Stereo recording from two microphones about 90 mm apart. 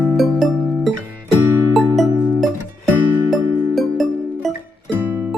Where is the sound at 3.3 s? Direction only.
Centre (ahead or behind).